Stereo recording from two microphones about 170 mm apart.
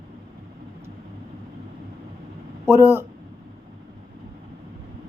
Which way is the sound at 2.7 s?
15° right (ahead or behind).